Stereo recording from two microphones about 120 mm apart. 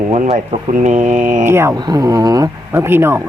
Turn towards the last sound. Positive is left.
turn(degrees=-20)  # may be behind; listen again after turning